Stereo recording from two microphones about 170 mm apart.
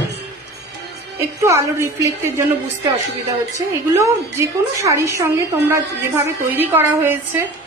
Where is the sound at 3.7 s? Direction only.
15° right (ahead or behind).